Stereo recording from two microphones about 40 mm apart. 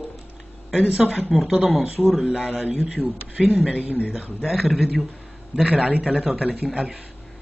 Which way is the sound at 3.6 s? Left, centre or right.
Right.